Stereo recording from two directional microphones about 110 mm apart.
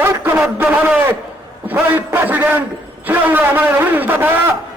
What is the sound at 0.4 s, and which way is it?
A man's voice, 10° right (ahead or behind).